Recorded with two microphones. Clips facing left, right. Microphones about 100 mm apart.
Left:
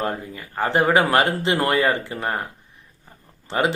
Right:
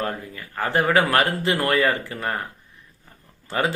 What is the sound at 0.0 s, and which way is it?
Speech, 25° left (ahead or behind).